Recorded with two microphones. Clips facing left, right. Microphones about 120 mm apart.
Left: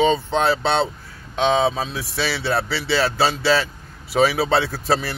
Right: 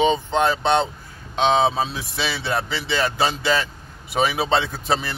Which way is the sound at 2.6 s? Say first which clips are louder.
Left 2 dB; 20° right (ahead or behind).